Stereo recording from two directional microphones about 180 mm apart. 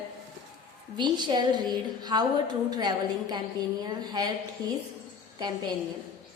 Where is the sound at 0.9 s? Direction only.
25° right (ahead or behind).